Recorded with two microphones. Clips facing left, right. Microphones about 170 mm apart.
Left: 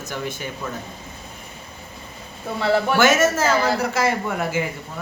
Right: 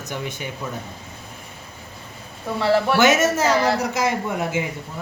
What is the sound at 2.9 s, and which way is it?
Speech, 15° right (ahead or behind).